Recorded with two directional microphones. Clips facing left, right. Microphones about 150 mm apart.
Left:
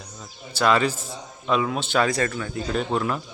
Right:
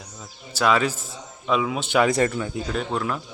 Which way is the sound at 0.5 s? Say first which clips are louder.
Even; 5° right (ahead or behind).